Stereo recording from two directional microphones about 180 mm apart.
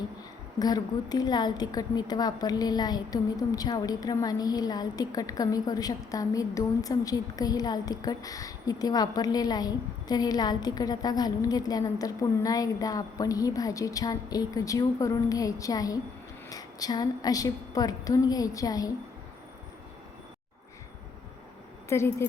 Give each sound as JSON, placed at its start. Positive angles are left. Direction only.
{"t": 0.6, "sound": "a woman's voice", "side_deg": 20}
{"t": 21.8, "sound": "a woman's voice", "side_deg": 15}